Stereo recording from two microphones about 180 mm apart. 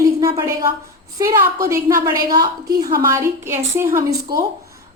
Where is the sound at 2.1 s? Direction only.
20° right (ahead or behind).